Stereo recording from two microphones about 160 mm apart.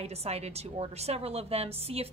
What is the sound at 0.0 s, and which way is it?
A woman's voice, 40° right (ahead or behind).